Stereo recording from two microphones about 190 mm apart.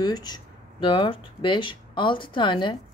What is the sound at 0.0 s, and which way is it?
Speech, 20° left (ahead or behind).